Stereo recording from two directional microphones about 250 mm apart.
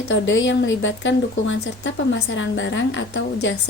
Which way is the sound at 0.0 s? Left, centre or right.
Left.